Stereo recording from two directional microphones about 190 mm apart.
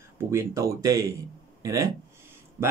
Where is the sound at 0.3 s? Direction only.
15° right (ahead or behind).